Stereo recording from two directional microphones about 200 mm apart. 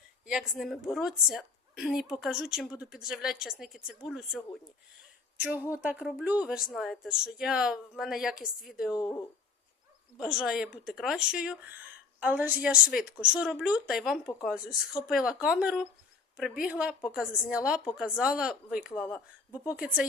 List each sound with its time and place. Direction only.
0.3 s a woman's voice: 5° right (ahead or behind)
9.0 s speech: 20° left (ahead or behind)
10.2 s a woman's voice: 5° right (ahead or behind)